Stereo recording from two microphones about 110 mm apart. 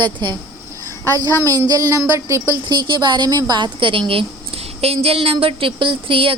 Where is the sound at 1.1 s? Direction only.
30° right (ahead or behind).